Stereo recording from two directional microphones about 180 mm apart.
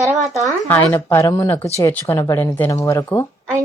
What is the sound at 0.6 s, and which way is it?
Speech, 10° left (ahead or behind).